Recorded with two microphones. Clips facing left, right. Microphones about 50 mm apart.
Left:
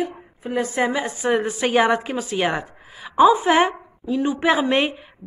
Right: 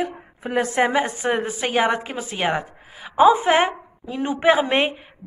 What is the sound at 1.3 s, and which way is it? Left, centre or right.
A woman's voice, centre.